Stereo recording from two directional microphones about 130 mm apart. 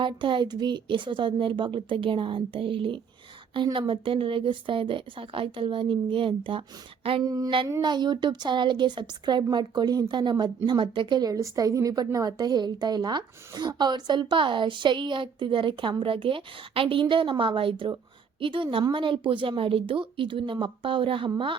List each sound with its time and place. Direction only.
0.0 s a woman's voice: 40° right (ahead or behind)
7.3 s a woman's voice: 30° right (ahead or behind)